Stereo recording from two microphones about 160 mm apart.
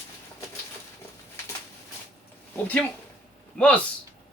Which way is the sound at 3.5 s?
5° left (ahead or behind).